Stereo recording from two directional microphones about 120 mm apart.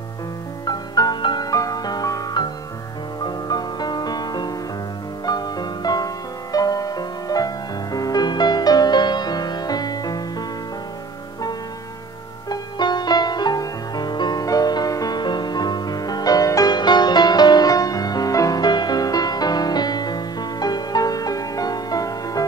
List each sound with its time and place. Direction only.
0.7 s music: 35° left (ahead or behind)
12.4 s music: 35° left (ahead or behind)